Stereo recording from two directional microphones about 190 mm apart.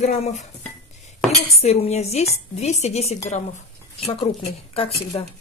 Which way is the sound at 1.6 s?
35° left (ahead or behind).